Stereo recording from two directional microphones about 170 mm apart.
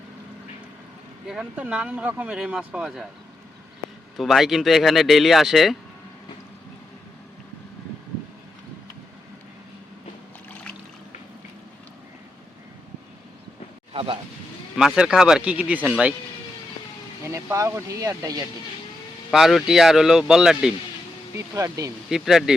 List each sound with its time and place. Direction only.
1.3 s speech: 5° right (ahead or behind)
4.2 s speech: centre (ahead or behind)
13.9 s speech: 35° right (ahead or behind)
14.8 s speech: 5° right (ahead or behind)
17.2 s speech: 15° right (ahead or behind)
19.3 s speech: centre (ahead or behind)
21.3 s speech: 20° right (ahead or behind)
22.1 s speech: centre (ahead or behind)